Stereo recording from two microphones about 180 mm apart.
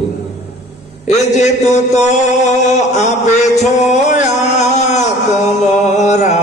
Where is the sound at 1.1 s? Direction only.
40° left (ahead or behind).